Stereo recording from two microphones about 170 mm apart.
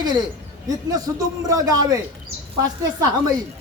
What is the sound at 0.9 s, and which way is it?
Speech, 20° right (ahead or behind).